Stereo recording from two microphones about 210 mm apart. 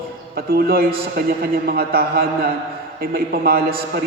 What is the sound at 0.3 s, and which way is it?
A man's voice, 45° right (ahead or behind).